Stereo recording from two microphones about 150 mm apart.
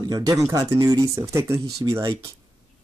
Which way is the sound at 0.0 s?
25° right (ahead or behind).